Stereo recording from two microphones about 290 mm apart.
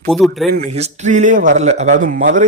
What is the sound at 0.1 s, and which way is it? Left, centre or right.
Speech, centre.